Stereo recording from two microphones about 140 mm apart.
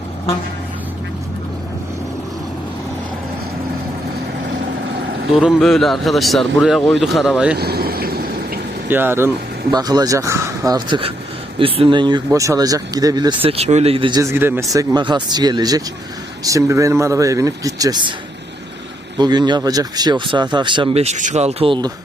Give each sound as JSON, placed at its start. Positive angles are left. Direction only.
{"t": 5.4, "sound": "speech", "side_deg": 0}
{"t": 7.8, "sound": "vehicle", "side_deg": -90}
{"t": 8.9, "sound": "speech", "side_deg": -15}
{"t": 9.7, "sound": "speech", "side_deg": -30}
{"t": 13.4, "sound": "speech", "side_deg": -45}
{"t": 14.2, "sound": "speech", "side_deg": -20}
{"t": 19.1, "sound": "speech", "side_deg": -30}